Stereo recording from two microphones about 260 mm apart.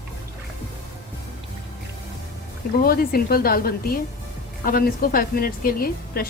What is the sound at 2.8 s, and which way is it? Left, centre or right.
A woman's voice, left.